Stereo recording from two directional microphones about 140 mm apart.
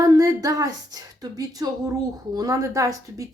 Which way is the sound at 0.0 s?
25° right (ahead or behind).